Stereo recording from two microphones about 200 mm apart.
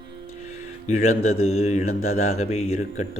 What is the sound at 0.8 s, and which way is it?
Speech, 35° left (ahead or behind).